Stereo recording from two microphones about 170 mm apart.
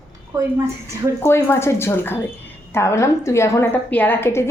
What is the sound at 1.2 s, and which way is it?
A woman's voice, 15° left (ahead or behind).